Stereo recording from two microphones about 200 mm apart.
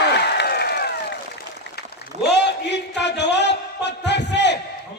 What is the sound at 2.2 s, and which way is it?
Music, 60° left (ahead or behind).